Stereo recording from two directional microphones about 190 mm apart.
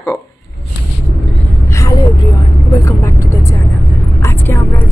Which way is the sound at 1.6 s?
15° left (ahead or behind).